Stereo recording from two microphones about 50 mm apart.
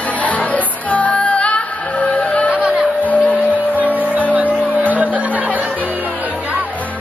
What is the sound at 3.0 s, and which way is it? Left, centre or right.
Music, left.